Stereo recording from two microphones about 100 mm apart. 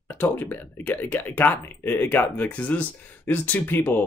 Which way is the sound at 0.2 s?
15° left (ahead or behind).